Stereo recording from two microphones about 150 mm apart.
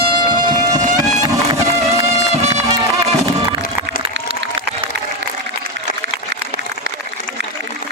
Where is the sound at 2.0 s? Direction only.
45° right (ahead or behind).